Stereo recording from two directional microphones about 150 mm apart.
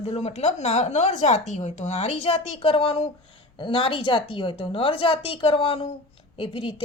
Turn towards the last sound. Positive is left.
turn(degrees=35)  # may be behind; listen again after turning